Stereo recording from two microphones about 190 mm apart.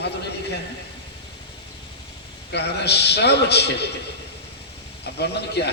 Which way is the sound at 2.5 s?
60° left (ahead or behind).